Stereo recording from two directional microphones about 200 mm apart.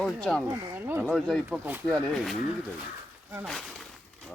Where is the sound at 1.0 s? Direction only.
Centre (ahead or behind).